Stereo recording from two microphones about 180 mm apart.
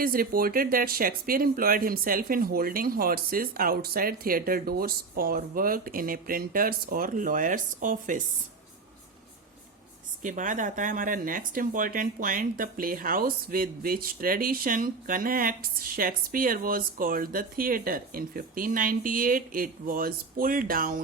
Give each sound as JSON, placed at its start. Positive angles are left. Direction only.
{"t": 0.0, "sound": "speech", "side_deg": -55}
{"t": 10.2, "sound": "speech", "side_deg": -45}